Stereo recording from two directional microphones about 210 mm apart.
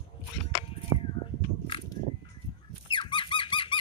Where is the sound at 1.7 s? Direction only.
25° left (ahead or behind).